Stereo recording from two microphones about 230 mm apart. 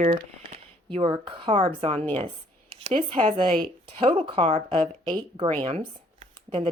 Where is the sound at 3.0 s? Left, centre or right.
Right.